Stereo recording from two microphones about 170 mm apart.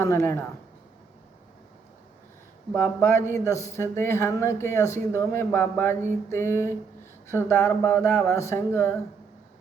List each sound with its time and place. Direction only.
0.0 s speech: 15° left (ahead or behind)
2.7 s speech: 15° left (ahead or behind)